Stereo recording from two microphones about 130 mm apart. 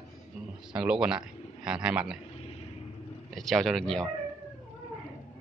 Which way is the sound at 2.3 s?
50° left (ahead or behind).